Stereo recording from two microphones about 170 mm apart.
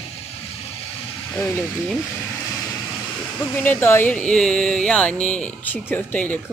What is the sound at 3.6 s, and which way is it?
Speech, 15° left (ahead or behind).